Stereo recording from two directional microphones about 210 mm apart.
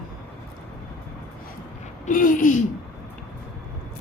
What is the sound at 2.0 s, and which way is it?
Speech, 40° left (ahead or behind).